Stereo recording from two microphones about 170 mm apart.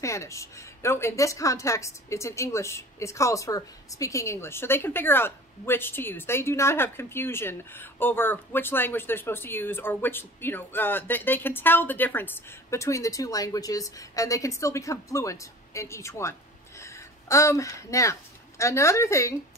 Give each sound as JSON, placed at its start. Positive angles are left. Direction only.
{"t": 0.0, "sound": "a woman's voice", "side_deg": 15}